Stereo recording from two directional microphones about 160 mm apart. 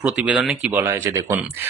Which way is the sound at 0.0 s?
5° right (ahead or behind).